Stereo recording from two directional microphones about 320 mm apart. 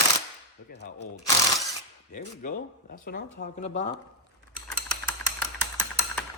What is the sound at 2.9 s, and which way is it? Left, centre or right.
Speech, left.